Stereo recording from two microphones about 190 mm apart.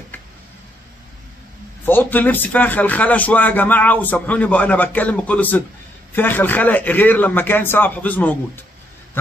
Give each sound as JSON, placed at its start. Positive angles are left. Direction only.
{"t": 1.9, "sound": "speech", "side_deg": 10}